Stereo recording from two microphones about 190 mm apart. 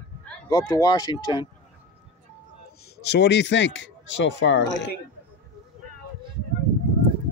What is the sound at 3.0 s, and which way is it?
Speech, 60° left (ahead or behind).